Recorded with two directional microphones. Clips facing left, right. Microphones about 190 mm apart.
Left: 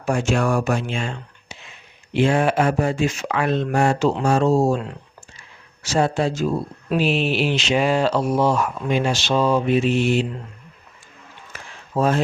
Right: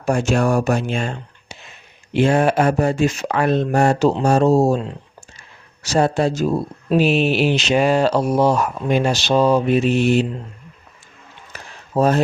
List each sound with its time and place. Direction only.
0.0 s speech: 40° right (ahead or behind)
5.8 s speech: 40° right (ahead or behind)
11.5 s a sound: 40° right (ahead or behind)